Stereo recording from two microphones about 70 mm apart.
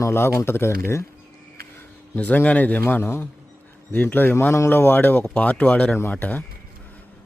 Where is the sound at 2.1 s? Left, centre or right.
Left.